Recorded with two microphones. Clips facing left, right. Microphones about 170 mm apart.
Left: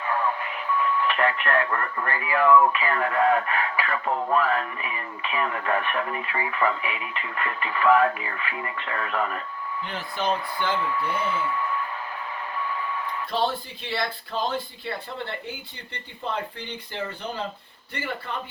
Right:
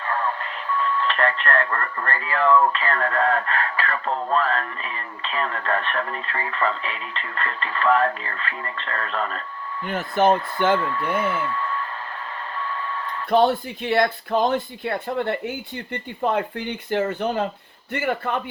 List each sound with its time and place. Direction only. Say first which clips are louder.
0.0 s speech: even; 10° left (ahead or behind)
9.8 s speech: right 9 dB; 50° right (ahead or behind)
11.4 s a sound: right 1 dB; 10° left (ahead or behind)
13.3 s speech: right 9 dB; 50° right (ahead or behind)